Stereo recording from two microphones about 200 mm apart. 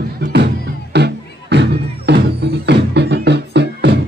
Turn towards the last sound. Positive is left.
turn(degrees=-60)  # may be behind; listen again after turning